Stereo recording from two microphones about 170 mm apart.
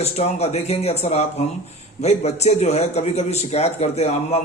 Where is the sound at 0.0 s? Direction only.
40° left (ahead or behind).